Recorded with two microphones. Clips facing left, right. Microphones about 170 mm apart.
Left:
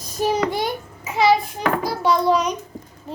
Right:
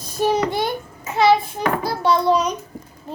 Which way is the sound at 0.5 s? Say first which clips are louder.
Right 1 dB; 10° left (ahead or behind).